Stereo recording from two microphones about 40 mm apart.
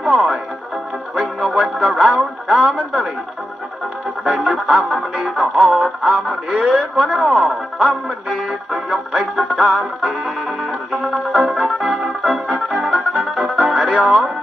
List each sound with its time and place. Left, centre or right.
0.0 s music: centre
4.2 s music: centre
6.5 s speech: centre
10.9 s music: centre